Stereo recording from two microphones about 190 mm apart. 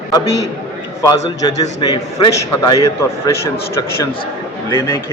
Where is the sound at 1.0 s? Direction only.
20° left (ahead or behind).